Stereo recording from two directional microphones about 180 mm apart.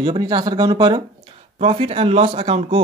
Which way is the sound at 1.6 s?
30° right (ahead or behind).